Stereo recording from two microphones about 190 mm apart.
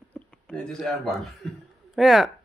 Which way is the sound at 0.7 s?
Centre (ahead or behind).